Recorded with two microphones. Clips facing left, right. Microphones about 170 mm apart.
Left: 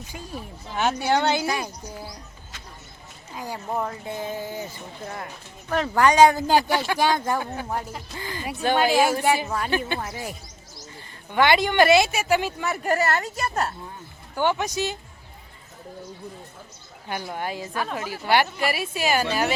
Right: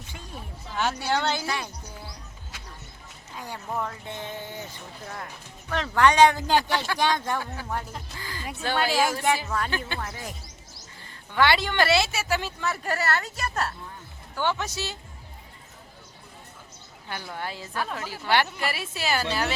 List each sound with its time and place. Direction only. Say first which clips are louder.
0.7 s speech: left 4 dB; 20° left (ahead or behind)
3.3 s speech: left 4 dB; 10° left (ahead or behind)
7.3 s a woman's voice: left 3 dB; 20° left (ahead or behind)
17.1 s speech: left 5 dB; 15° left (ahead or behind)